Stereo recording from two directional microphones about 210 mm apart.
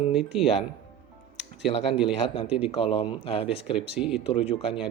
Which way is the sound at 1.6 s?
25° left (ahead or behind).